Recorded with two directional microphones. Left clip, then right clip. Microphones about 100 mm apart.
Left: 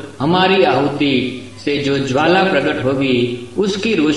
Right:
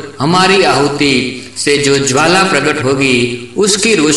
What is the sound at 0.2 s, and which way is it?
A man's voice, 35° right (ahead or behind).